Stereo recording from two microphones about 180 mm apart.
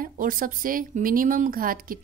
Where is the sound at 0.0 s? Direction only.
50° right (ahead or behind).